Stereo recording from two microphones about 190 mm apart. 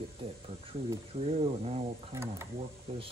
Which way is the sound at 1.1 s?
30° right (ahead or behind).